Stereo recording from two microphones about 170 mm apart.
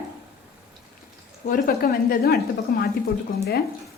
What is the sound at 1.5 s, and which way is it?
A woman's voice, 65° left (ahead or behind).